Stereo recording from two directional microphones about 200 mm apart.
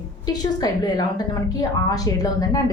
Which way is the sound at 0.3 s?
20° left (ahead or behind).